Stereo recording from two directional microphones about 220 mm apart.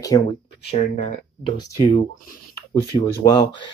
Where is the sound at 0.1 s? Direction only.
20° left (ahead or behind).